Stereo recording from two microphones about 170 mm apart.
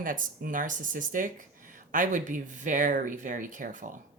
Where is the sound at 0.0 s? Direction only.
55° right (ahead or behind).